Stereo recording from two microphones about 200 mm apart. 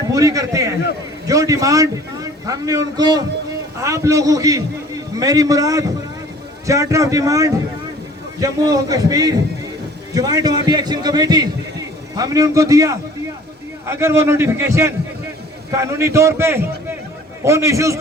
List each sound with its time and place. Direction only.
0.1 s a man's voice: 15° right (ahead or behind)